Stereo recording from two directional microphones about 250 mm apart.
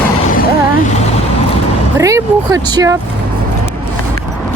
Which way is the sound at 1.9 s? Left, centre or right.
Centre.